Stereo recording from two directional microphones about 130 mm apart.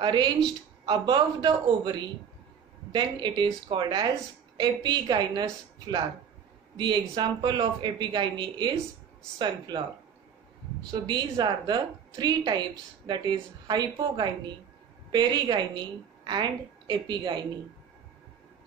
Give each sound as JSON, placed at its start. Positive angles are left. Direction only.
{"t": 0.0, "sound": "a woman's voice", "side_deg": -35}
{"t": 10.9, "sound": "a woman's voice", "side_deg": -35}